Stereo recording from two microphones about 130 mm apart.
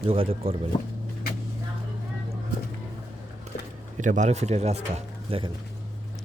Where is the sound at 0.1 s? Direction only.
45° right (ahead or behind).